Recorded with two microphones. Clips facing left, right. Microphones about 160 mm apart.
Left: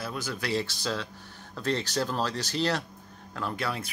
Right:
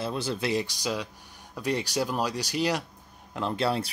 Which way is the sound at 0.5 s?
15° right (ahead or behind).